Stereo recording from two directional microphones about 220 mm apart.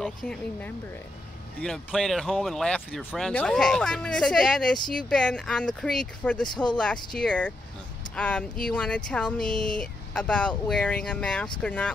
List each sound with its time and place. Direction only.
0.0 s speech: 5° left (ahead or behind)
6.5 s speech: 20° left (ahead or behind)
7.2 s speech: 5° left (ahead or behind)